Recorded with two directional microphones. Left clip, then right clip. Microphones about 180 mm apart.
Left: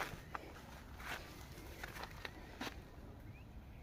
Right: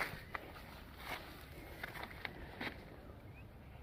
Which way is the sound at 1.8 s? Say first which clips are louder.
Right 3 dB; 25° right (ahead or behind).